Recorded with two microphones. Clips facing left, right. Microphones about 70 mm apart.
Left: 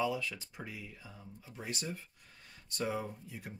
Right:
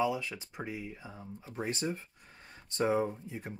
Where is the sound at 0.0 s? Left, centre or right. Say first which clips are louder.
Right 3 dB; right.